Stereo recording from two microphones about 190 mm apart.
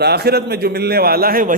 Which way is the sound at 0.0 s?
60° right (ahead or behind).